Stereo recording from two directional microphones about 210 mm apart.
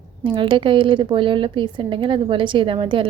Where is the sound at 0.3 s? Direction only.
25° right (ahead or behind).